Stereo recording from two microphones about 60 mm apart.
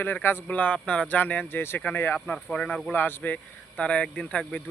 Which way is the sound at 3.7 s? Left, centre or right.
Centre.